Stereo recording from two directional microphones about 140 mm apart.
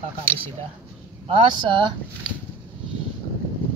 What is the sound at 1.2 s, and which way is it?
Speech, 40° right (ahead or behind).